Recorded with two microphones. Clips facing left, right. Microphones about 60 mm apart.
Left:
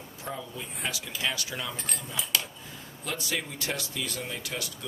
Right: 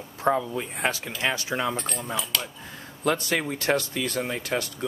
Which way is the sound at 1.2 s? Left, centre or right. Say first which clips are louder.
Right 6 dB; right.